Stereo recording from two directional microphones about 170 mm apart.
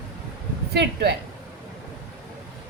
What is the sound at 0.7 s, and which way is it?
Speech, 85° right.